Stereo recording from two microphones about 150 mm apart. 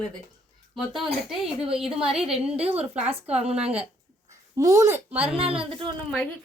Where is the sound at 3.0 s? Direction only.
45° right (ahead or behind).